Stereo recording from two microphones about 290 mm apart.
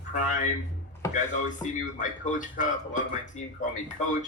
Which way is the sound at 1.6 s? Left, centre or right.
Left.